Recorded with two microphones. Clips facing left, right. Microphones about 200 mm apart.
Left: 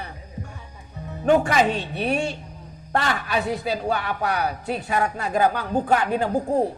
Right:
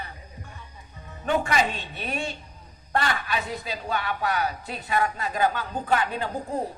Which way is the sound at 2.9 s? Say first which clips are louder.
Left 3 dB; 45° left (ahead or behind).